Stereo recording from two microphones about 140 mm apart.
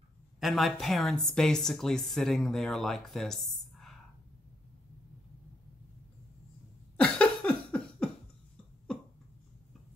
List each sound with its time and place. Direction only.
0.4 s a woman's voice: centre (ahead or behind)
7.0 s cough: 5° left (ahead or behind)